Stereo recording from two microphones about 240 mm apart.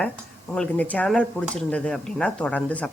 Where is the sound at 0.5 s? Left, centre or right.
Centre.